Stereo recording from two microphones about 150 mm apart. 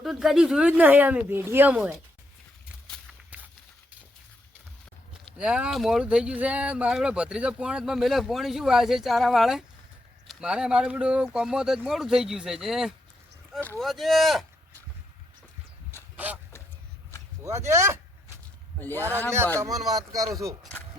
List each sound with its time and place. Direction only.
0.0 s speech: centre (ahead or behind)
5.4 s speech: 5° right (ahead or behind)
13.6 s speech: 10° left (ahead or behind)
13.8 s speech: centre (ahead or behind)
16.1 s a sound: 10° right (ahead or behind)
17.7 s speech: 20° right (ahead or behind)